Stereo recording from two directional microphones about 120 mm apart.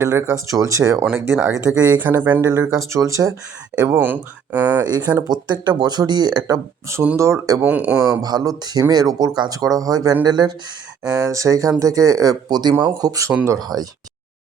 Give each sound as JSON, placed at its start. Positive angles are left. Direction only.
{"t": 0.0, "sound": "speech", "side_deg": -25}
{"t": 2.0, "sound": "speech", "side_deg": -15}
{"t": 3.9, "sound": "speech", "side_deg": -15}
{"t": 4.8, "sound": "speech", "side_deg": -35}
{"t": 6.8, "sound": "speech", "side_deg": -25}
{"t": 7.6, "sound": "speech", "side_deg": -15}
{"t": 8.1, "sound": "speech", "side_deg": -35}